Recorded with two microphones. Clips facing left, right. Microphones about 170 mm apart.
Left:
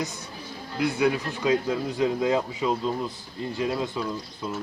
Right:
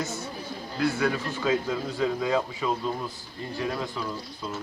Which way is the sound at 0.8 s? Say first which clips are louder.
Left 2 dB; 20° left (ahead or behind).